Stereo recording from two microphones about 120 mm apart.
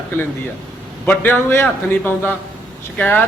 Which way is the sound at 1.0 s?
15° left (ahead or behind).